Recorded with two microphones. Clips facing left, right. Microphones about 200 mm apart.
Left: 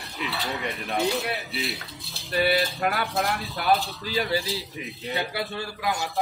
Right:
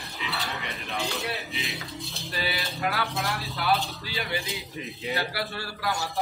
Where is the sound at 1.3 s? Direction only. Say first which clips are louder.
Left 3 dB; centre (ahead or behind).